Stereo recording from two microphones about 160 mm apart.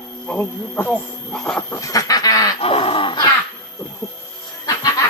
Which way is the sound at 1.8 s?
20° left (ahead or behind).